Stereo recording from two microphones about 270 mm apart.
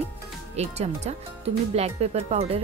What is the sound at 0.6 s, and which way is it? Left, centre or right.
Speech, right.